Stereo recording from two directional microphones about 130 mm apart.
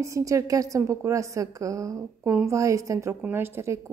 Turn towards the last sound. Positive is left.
turn(degrees=-20)  # may be behind; listen again after turning